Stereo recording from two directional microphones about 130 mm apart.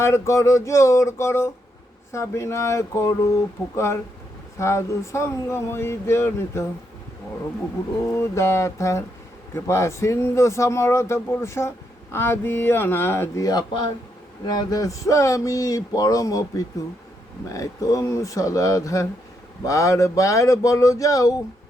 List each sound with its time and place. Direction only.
0.0 s speech: 20° left (ahead or behind)
4.5 s speech: 20° left (ahead or behind)
8.1 s speech: 20° left (ahead or behind)